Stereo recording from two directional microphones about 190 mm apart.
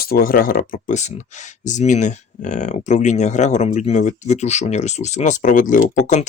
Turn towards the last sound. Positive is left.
turn(degrees=40)  # may be behind; listen again after turning